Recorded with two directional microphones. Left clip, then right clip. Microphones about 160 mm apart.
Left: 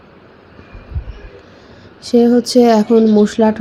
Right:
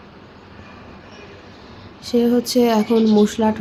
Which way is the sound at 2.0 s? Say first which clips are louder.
Left 6 dB; 25° left (ahead or behind).